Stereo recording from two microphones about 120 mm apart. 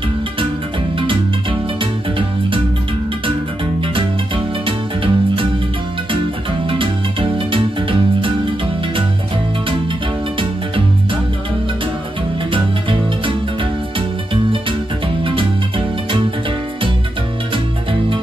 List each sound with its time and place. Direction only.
0.9 s music: 45° right (ahead or behind)
4.6 s music: 45° right (ahead or behind)
6.7 s music: 45° right (ahead or behind)
12.4 s music: 45° right (ahead or behind)